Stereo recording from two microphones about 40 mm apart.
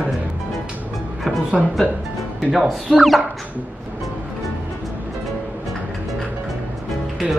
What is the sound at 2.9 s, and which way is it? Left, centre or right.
Speech, centre.